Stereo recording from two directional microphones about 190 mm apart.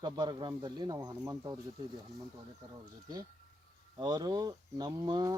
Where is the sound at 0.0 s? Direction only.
20° right (ahead or behind).